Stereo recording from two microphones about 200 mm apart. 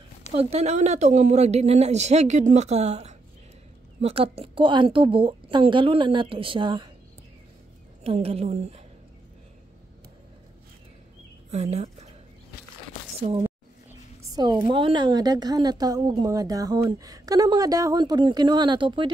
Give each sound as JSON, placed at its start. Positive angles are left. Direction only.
{"t": 0.3, "sound": "a woman's voice", "side_deg": -30}
{"t": 8.0, "sound": "speech", "side_deg": -30}
{"t": 11.5, "sound": "speech", "side_deg": -35}
{"t": 13.2, "sound": "a woman's voice", "side_deg": -30}
{"t": 13.8, "sound": "a woman's voice", "side_deg": -20}